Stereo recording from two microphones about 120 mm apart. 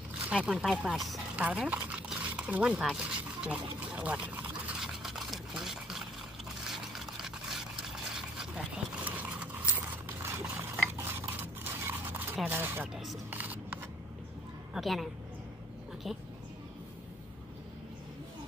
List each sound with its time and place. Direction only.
0.3 s speech: 5° right (ahead or behind)
1.3 s stir: 10° right (ahead or behind)
6.6 s a sound: centre (ahead or behind); by 10.4 s 20° right (ahead or behind)
10.4 s pig: 15° right (ahead or behind)
10.9 s a sound: 20° right (ahead or behind)
12.4 s speech: 15° right (ahead or behind)
12.9 s speech: centre (ahead or behind)
13.3 s scissors: 15° right (ahead or behind)
14.7 s a woman's voice: centre (ahead or behind)